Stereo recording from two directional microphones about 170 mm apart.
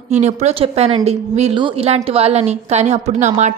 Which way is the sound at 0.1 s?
40° right (ahead or behind).